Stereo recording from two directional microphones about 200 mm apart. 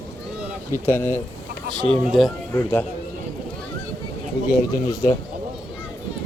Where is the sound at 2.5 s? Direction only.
10° left (ahead or behind).